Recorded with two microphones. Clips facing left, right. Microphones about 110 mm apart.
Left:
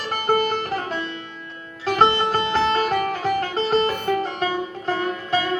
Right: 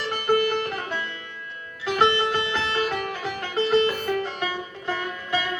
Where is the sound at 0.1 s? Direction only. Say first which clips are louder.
Left 1 dB; 40° left (ahead or behind).